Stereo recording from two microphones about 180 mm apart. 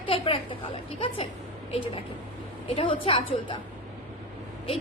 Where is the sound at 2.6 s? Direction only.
30° left (ahead or behind).